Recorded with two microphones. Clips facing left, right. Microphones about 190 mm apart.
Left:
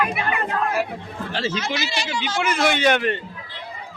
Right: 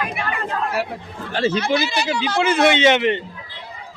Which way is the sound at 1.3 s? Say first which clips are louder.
Right 7 dB; 55° right (ahead or behind).